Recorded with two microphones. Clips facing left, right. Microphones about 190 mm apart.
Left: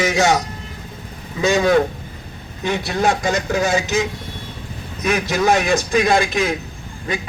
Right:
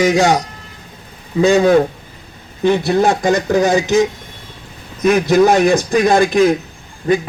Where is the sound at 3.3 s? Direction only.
15° right (ahead or behind).